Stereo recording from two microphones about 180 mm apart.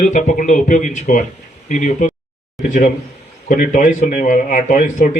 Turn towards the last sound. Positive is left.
turn(degrees=50)  # may be behind; listen again after turning